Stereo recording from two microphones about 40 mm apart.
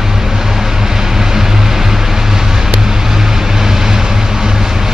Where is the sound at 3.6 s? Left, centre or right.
Centre.